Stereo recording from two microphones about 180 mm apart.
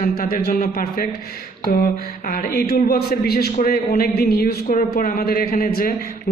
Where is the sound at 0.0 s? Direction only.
55° left (ahead or behind).